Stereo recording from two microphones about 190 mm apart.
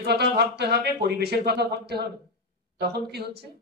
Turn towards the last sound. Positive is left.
turn(degrees=-60)  # may be behind; listen again after turning